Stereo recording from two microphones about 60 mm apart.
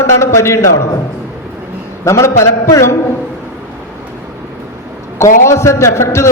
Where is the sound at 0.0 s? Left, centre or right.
Left.